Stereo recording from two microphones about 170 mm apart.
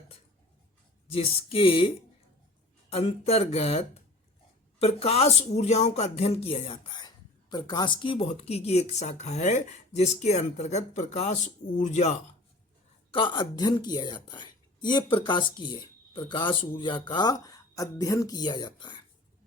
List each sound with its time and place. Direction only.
1.1 s speech: 35° left (ahead or behind)
13.1 s a woman's voice: 25° left (ahead or behind)